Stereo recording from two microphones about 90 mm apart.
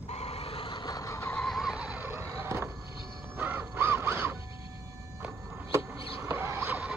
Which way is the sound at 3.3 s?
25° right (ahead or behind).